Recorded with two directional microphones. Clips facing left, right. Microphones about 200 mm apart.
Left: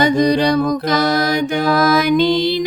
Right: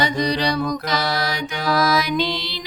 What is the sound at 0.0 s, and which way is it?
Music, 50° left (ahead or behind).